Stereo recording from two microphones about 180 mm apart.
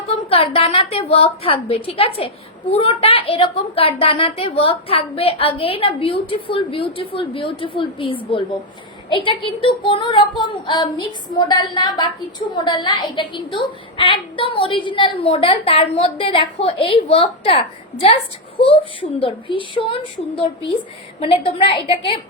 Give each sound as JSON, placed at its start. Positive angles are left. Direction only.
{"t": 0.1, "sound": "a woman's voice", "side_deg": 30}